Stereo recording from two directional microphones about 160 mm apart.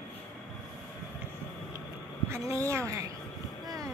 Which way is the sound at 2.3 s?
15° right (ahead or behind).